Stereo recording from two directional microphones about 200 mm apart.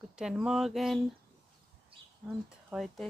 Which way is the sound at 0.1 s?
5° right (ahead or behind).